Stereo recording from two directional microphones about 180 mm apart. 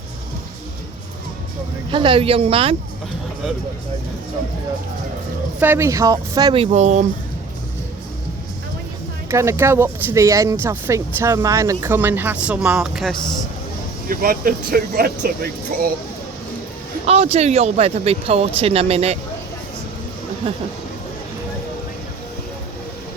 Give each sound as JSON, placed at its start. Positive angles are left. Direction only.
{"t": 1.9, "sound": "speech", "side_deg": -30}
{"t": 5.5, "sound": "speech", "side_deg": -10}
{"t": 9.3, "sound": "speech", "side_deg": -15}
{"t": 14.1, "sound": "speech", "side_deg": -50}
{"t": 17.1, "sound": "speech", "side_deg": -35}